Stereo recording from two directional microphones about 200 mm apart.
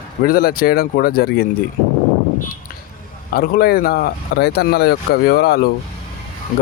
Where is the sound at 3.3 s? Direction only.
50° left (ahead or behind).